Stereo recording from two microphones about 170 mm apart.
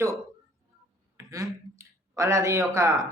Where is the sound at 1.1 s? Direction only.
20° right (ahead or behind).